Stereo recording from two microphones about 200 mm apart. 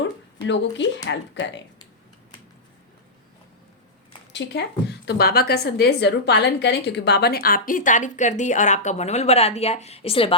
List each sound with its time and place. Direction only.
0.0 s a sound: 65° left (ahead or behind)
1.0 s speech: 65° left (ahead or behind)
4.3 s a woman's voice: 60° left (ahead or behind); by 10.3 s 30° left (ahead or behind)